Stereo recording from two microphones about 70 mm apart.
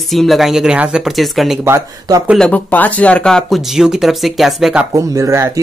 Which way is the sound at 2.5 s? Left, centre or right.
Left.